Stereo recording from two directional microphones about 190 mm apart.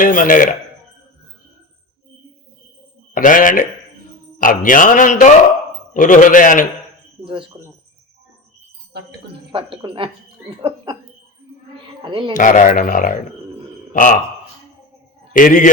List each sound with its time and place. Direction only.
0.0 s a man's voice: 45° left (ahead or behind)
3.2 s a man's voice: 45° left (ahead or behind)
7.3 s a woman's voice: 25° right (ahead or behind)
9.5 s a woman's voice: 25° right (ahead or behind)
12.0 s a woman's voice: 25° right (ahead or behind)
12.3 s a man's voice: 45° left (ahead or behind)
15.3 s a man's voice: 45° left (ahead or behind)